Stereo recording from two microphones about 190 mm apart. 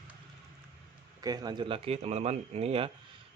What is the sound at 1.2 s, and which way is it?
Speech, 20° right (ahead or behind).